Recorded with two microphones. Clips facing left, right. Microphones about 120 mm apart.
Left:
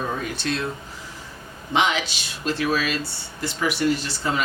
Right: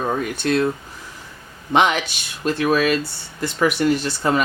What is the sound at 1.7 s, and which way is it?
Speech, 55° right (ahead or behind).